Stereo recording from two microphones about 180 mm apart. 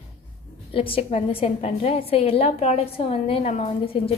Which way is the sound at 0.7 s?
30° left (ahead or behind).